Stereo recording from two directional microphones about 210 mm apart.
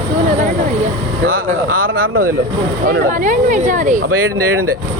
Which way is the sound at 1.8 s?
75° right (ahead or behind).